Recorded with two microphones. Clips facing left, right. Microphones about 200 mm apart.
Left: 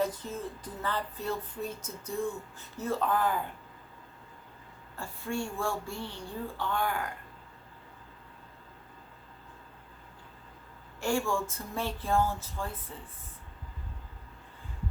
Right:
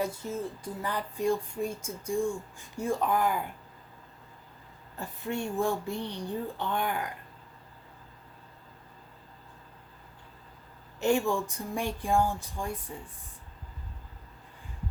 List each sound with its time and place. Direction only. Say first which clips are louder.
0.0 s speech: even; 10° right (ahead or behind)
4.9 s speech: right 1 dB; 20° right (ahead or behind)
11.0 s speech: right 3 dB; 20° right (ahead or behind)